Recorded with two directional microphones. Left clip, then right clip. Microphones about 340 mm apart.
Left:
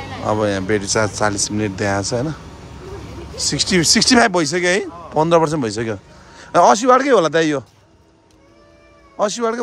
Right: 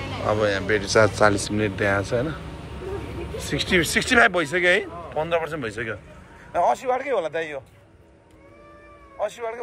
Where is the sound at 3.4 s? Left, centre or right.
Centre.